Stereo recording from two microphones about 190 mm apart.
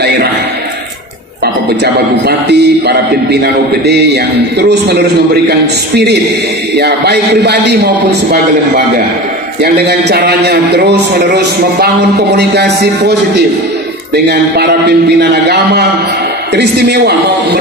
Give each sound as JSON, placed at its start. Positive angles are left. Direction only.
{"t": 2.2, "sound": "a man's voice", "side_deg": -60}